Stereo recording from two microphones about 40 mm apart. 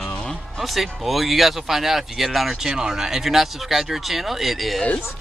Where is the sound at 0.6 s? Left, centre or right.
Centre.